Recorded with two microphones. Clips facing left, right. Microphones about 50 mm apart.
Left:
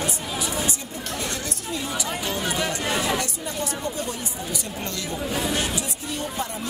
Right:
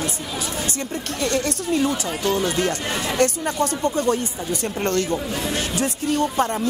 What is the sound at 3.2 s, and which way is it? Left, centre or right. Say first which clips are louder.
A woman's voice: right 9 dB; right.